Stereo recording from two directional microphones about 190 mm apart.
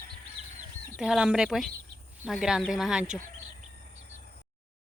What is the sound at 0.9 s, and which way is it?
Speech, 5° right (ahead or behind).